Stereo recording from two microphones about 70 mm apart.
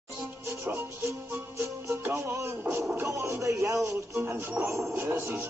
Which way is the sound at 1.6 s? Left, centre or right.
Right.